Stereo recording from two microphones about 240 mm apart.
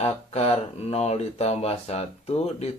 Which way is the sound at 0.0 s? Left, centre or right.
Left.